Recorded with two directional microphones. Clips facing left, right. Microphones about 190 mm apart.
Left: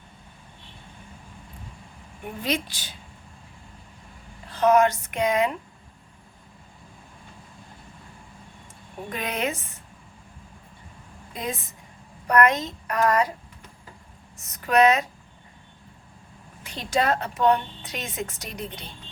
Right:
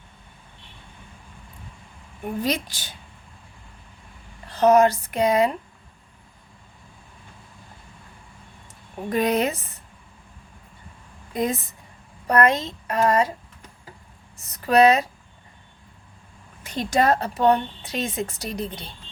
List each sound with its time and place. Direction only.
2.4 s speech: 40° right (ahead or behind)
4.6 s a woman's voice: 35° right (ahead or behind)
9.0 s a woman's voice: 40° right (ahead or behind)
12.3 s speech: 30° right (ahead or behind)
14.3 s speech: 35° right (ahead or behind)
16.6 s a woman's voice: 45° right (ahead or behind)